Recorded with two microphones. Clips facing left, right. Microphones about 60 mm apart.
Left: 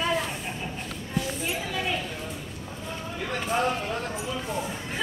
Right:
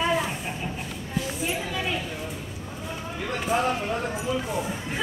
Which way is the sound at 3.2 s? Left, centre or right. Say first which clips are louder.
Right 1 dB; centre.